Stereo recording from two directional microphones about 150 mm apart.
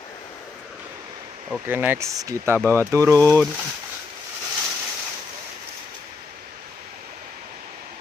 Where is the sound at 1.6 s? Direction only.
15° right (ahead or behind).